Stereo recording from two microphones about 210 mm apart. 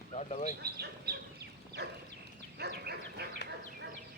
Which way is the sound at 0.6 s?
50° right (ahead or behind).